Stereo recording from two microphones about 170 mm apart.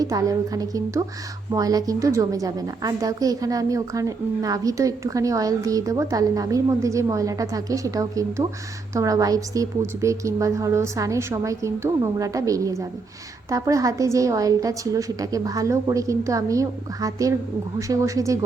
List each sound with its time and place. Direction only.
0.0 s a woman's voice: 20° right (ahead or behind)